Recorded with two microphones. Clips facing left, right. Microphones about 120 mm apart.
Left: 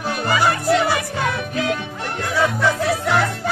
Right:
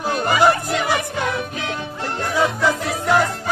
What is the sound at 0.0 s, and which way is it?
Music, 40° right (ahead or behind).